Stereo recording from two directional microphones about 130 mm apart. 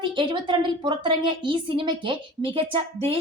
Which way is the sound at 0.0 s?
40° right (ahead or behind).